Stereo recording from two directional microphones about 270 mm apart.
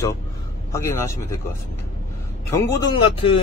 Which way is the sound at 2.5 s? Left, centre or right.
Centre.